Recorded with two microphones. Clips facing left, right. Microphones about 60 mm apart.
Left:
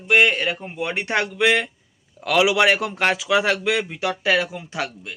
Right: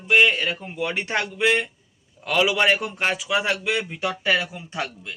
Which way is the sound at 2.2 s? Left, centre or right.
Left.